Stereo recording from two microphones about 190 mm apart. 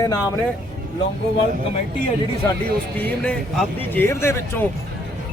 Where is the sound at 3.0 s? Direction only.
10° left (ahead or behind).